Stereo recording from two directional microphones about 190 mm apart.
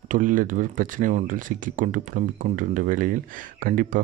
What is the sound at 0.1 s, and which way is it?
Speech, 45° right (ahead or behind).